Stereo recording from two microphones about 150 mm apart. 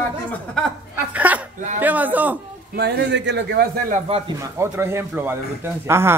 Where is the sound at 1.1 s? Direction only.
10° right (ahead or behind).